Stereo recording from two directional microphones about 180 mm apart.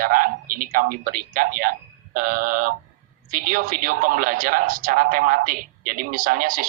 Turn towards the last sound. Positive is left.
turn(degrees=-50)  # may be behind; listen again after turning